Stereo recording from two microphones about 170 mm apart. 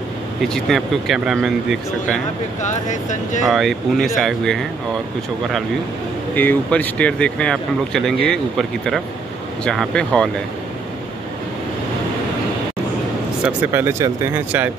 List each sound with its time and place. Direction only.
0.5 s speech: centre (ahead or behind)
2.6 s speech: 45° left (ahead or behind)
3.4 s speech: centre (ahead or behind)
6.3 s speech: 10° left (ahead or behind)
13.4 s speech: 10° right (ahead or behind)